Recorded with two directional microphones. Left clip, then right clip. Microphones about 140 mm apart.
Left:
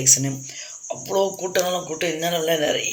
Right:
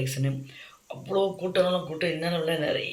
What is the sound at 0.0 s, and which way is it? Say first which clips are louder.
Speech: left 13 dB; 35° left (ahead or behind).